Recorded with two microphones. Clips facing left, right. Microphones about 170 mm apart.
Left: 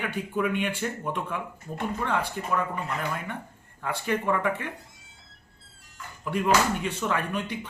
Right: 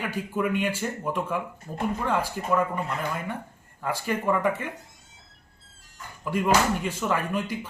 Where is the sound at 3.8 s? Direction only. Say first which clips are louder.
Right 1 dB; 5° right (ahead or behind).